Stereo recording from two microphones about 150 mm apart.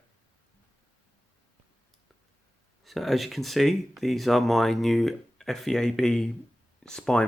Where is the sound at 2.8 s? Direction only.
Centre (ahead or behind).